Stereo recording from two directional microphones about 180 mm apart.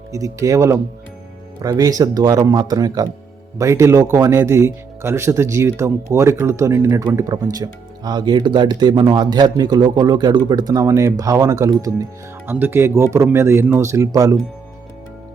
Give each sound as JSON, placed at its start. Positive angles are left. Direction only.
{"t": 0.1, "sound": "speech", "side_deg": -20}